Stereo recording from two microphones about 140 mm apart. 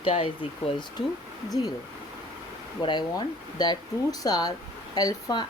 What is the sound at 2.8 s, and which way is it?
Speech, 30° left (ahead or behind).